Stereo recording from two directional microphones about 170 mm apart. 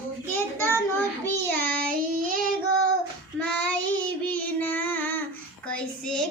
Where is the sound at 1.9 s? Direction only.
50° right (ahead or behind).